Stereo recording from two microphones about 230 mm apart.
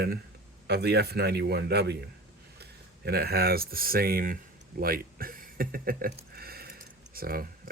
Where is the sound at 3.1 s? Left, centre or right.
Right.